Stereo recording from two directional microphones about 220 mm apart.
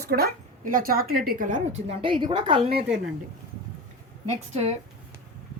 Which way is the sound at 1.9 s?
25° right (ahead or behind).